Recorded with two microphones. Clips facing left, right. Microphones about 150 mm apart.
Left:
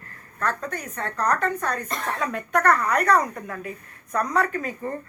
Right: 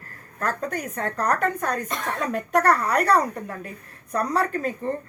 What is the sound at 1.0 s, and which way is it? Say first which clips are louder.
A woman's voice: even; 45° right (ahead or behind).